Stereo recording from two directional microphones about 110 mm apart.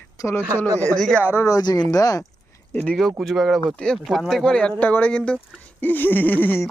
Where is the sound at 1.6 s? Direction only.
40° left (ahead or behind).